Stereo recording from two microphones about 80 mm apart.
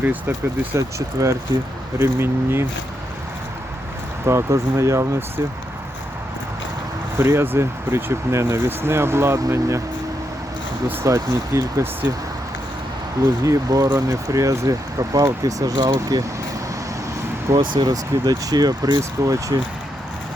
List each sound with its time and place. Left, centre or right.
0.0 s speech: right
0.8 s speech: right
4.3 s speech: right
7.2 s speech: right
11.0 s speech: right
13.4 s speech: right
17.5 s speech: right